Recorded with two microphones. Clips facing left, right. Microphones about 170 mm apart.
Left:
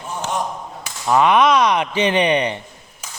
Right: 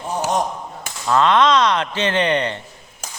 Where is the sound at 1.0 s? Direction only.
15° left (ahead or behind).